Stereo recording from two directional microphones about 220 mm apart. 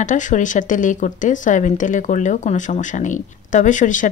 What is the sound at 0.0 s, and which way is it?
Speech, 35° left (ahead or behind).